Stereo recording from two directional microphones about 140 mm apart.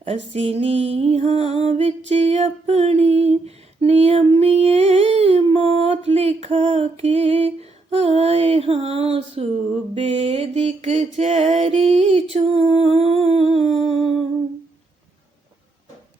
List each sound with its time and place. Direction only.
0.0 s music: 45° right (ahead or behind)